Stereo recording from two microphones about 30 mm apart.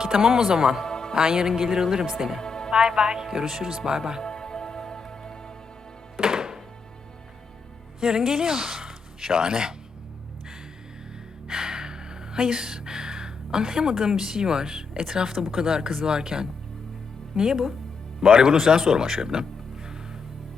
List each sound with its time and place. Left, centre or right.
0.0 s speech: centre
0.9 s music: left
1.1 s speech: right
2.4 s music: left
2.7 s speech: right
4.2 s music: left
6.1 s music: right
8.0 s speech: right
11.4 s speech: right